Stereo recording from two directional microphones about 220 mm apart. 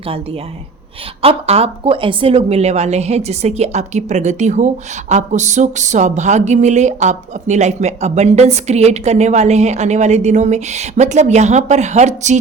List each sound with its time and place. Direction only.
1.2 s a woman's voice: 25° right (ahead or behind)